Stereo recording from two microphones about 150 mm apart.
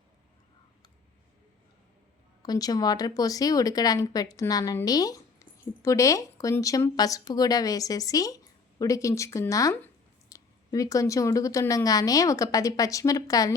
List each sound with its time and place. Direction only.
2.4 s speech: 25° left (ahead or behind)